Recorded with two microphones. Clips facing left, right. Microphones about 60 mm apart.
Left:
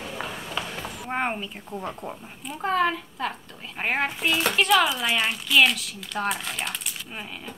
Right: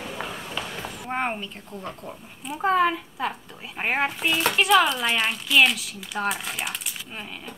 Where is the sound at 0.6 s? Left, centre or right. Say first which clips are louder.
Even; centre.